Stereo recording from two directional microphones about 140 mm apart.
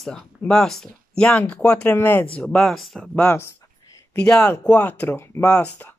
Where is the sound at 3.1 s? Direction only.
15° left (ahead or behind).